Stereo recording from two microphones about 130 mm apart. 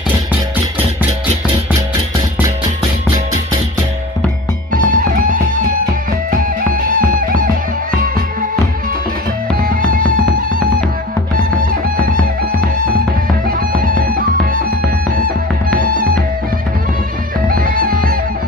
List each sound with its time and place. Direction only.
4.7 s music: 90° right
6.7 s music: 90° right
9.7 s music: 90° right
13.5 s music: 90° right
15.7 s music: 90° right
17.5 s music: 90° right